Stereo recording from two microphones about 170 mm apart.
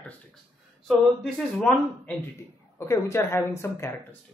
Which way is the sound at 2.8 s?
15° left (ahead or behind).